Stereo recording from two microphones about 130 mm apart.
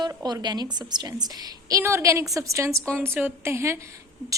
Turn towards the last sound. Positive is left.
turn(degrees=-25)  # may be behind; listen again after turning